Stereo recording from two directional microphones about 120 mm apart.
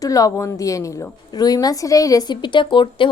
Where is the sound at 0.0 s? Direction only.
30° left (ahead or behind).